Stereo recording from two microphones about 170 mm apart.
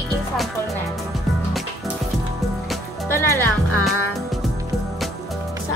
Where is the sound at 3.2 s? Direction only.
15° left (ahead or behind).